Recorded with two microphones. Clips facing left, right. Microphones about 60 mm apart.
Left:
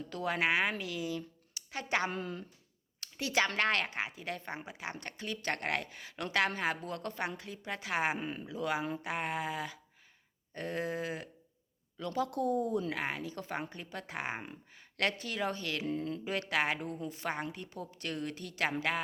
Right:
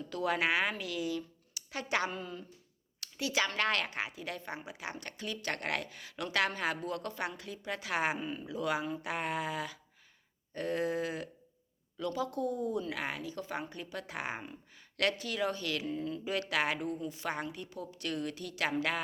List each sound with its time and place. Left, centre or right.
0.3 s speech: left
2.0 s a woman's voice: left
3.0 s a sound: left
3.6 s a woman's voice: left
12.1 s a woman's voice: left
12.9 s a woman's voice: left
15.9 s a woman's voice: left
16.2 s a woman's voice: left
17.0 s a woman's voice: left
17.2 s a woman's voice: left